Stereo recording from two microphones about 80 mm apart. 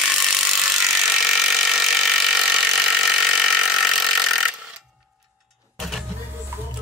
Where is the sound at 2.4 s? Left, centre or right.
Centre.